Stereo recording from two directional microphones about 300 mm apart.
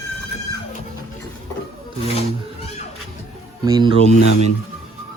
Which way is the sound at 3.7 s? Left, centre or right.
Centre.